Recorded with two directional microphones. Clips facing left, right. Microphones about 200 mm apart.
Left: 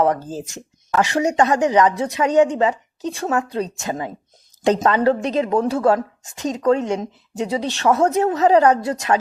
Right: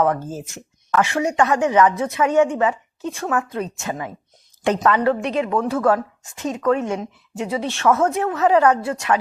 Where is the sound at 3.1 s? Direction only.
35° left (ahead or behind).